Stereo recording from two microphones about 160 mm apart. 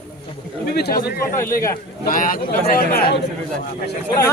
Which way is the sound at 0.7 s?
80° left.